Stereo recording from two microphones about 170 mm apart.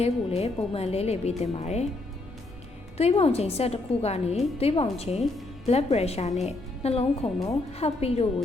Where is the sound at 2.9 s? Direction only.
35° left (ahead or behind).